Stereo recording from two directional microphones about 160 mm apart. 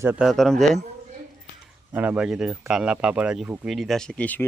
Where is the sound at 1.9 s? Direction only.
10° right (ahead or behind).